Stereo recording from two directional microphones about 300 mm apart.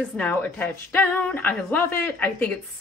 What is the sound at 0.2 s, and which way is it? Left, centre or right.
Speech, centre.